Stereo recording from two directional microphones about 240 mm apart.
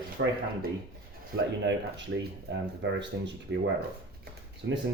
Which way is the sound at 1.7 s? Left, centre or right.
Right.